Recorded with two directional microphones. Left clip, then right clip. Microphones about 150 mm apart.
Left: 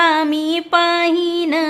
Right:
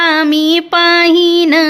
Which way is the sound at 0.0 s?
25° right (ahead or behind).